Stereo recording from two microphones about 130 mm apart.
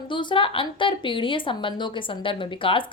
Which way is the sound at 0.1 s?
40° left (ahead or behind).